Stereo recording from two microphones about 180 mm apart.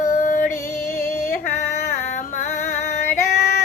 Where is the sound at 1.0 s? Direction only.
55° left (ahead or behind).